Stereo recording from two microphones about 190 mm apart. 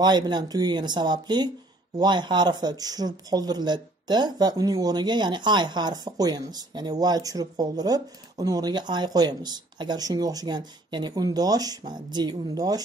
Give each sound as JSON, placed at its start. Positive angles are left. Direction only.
{"t": 0.0, "sound": "speech", "side_deg": -20}